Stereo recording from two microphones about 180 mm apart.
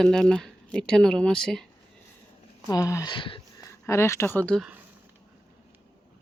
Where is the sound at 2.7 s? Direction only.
20° left (ahead or behind).